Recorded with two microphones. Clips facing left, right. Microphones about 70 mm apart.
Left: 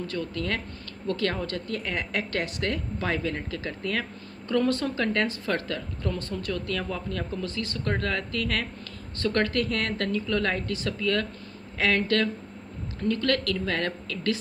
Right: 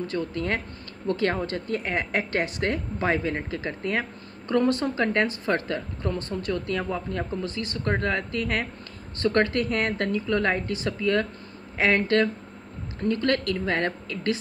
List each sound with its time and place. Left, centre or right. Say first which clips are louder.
0.0 s speech: right 3 dB; right